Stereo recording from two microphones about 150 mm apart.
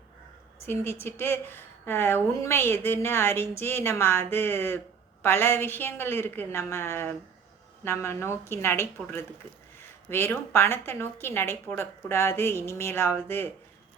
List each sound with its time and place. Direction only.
0.7 s a woman's voice: 15° left (ahead or behind)